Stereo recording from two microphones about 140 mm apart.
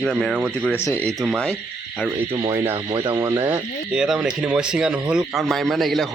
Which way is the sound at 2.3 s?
35° right (ahead or behind).